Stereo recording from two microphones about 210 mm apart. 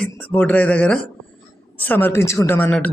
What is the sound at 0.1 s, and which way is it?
Speech, 10° left (ahead or behind).